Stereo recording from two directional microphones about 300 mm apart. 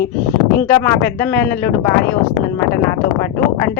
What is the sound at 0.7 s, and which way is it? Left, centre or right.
Speech, centre.